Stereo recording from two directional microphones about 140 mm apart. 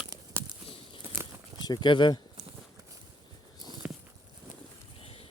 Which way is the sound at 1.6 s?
30° left (ahead or behind).